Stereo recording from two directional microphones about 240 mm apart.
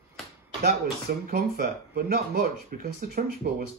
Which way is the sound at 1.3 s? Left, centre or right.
Right.